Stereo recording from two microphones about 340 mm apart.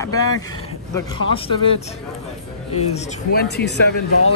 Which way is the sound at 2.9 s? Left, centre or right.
Left.